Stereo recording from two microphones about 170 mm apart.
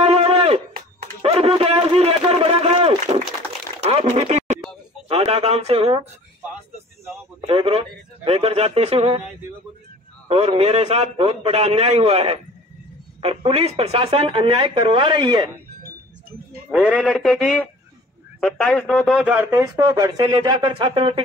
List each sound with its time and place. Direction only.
0.0 s a sound: 35° right (ahead or behind)
5.0 s speech: 35° right (ahead or behind)
7.4 s speech: 35° right (ahead or behind)
10.3 s speech: 35° right (ahead or behind)
16.7 s a man's voice: 5° right (ahead or behind); by 21.2 s 30° right (ahead or behind)